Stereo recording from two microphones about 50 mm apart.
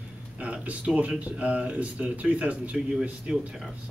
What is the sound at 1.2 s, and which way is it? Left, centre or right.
Speech, right.